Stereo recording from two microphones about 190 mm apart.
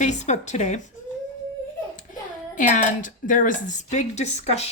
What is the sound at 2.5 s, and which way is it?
A woman's voice, 40° left (ahead or behind).